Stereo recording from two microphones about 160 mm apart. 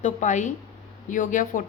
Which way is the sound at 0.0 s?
50° left (ahead or behind).